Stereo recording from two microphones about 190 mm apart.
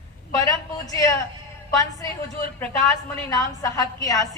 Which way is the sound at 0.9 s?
20° left (ahead or behind).